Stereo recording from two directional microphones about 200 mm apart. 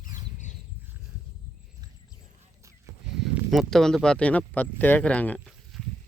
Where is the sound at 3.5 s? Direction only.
Centre (ahead or behind).